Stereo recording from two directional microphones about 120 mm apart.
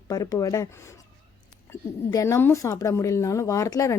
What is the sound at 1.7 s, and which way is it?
Speech, 25° left (ahead or behind).